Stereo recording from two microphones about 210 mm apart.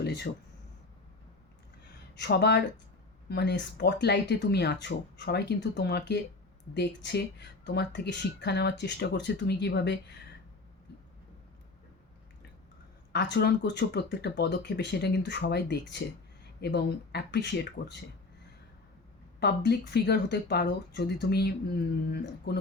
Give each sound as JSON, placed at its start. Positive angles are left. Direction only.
{"t": 0.0, "sound": "a sound", "side_deg": 55}
{"t": 2.1, "sound": "speech", "side_deg": 50}
{"t": 13.1, "sound": "speech", "side_deg": 55}
{"t": 19.4, "sound": "speech", "side_deg": 50}